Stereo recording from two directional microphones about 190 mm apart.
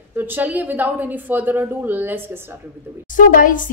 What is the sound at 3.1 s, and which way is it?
Speech, 45° left (ahead or behind).